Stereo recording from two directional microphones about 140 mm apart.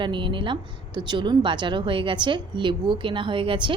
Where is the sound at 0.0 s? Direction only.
35° right (ahead or behind).